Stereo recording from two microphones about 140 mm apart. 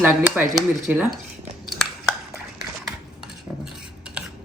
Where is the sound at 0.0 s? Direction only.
15° right (ahead or behind).